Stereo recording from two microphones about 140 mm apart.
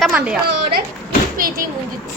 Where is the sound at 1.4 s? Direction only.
90° right.